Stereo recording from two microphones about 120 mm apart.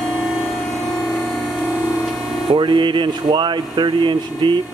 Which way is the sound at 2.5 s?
40° right (ahead or behind).